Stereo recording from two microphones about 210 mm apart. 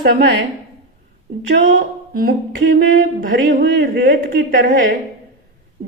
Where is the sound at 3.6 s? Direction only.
55° right (ahead or behind).